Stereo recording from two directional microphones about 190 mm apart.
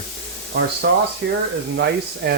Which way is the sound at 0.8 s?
55° right (ahead or behind).